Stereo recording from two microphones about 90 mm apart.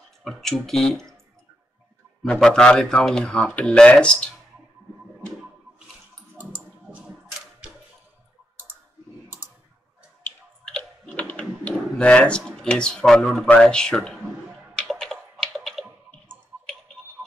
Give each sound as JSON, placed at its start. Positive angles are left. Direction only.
{"t": 0.2, "sound": "speech", "side_deg": 5}
{"t": 2.4, "sound": "speech", "side_deg": 10}
{"t": 6.3, "sound": "a sound", "side_deg": -15}
{"t": 10.8, "sound": "typing", "side_deg": 15}
{"t": 13.5, "sound": "speech", "side_deg": 10}
{"t": 14.9, "sound": "computer keyboard", "side_deg": 5}
{"t": 16.1, "sound": "a sound", "side_deg": 10}